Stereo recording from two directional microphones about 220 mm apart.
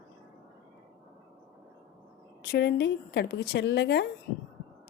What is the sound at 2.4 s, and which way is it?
Speech, 45° left (ahead or behind).